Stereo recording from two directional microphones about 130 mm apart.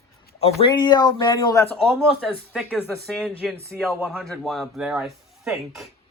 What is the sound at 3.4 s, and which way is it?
Speech, centre (ahead or behind).